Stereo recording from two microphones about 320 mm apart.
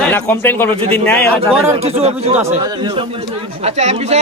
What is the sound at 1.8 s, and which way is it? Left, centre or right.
Speech, centre.